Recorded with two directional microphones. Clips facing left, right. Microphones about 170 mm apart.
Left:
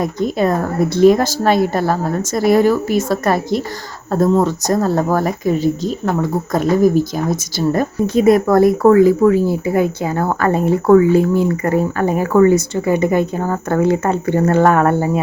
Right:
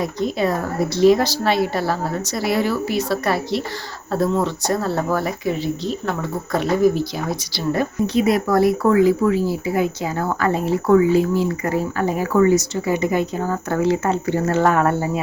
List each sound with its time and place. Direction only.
0.0 s speech: 50° left (ahead or behind)